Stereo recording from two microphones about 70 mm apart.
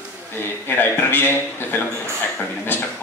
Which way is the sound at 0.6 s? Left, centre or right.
Left.